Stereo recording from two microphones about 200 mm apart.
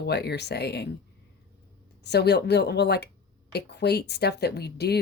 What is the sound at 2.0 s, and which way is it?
Speech, 55° left (ahead or behind).